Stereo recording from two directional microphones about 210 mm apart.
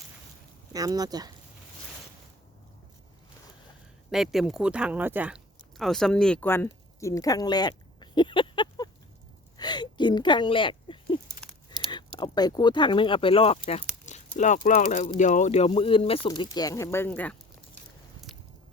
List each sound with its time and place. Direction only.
0.7 s speech: 15° right (ahead or behind)
4.1 s speech: centre (ahead or behind); by 13.8 s 30° left (ahead or behind)
14.0 s a sound: 35° left (ahead or behind)
14.8 s speech: 30° left (ahead or behind); by 17.3 s 10° left (ahead or behind)